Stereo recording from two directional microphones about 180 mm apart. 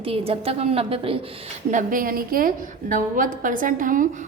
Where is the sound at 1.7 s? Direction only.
50° right (ahead or behind).